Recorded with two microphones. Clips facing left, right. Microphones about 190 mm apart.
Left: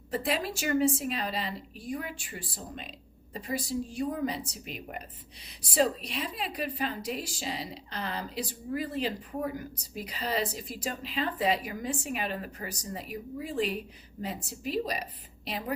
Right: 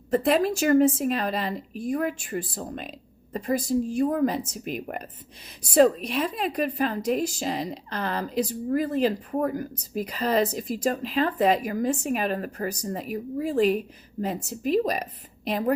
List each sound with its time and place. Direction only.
0.1 s a woman's voice: 45° right (ahead or behind)
3.9 s a woman's voice: 50° right (ahead or behind)